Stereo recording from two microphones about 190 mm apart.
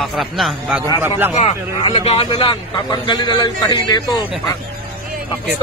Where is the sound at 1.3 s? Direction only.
30° left (ahead or behind).